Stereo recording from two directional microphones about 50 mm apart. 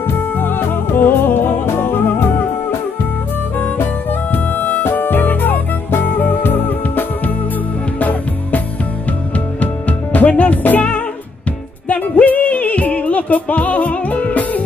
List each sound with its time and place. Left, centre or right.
0.4 s music: left
3.5 s music: left
9.6 s music: left
11.9 s music: left